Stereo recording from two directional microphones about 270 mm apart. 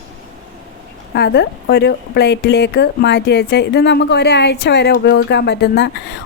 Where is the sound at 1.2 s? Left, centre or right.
Left.